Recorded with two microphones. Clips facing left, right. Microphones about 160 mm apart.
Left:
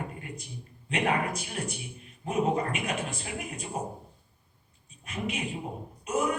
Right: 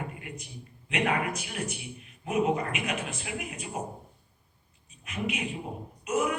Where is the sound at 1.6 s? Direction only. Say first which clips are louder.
Even; 30° left (ahead or behind).